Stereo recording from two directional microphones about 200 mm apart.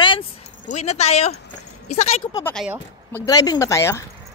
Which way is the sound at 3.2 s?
20° left (ahead or behind).